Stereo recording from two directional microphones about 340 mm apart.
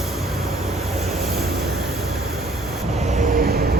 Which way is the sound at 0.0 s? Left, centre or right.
Centre.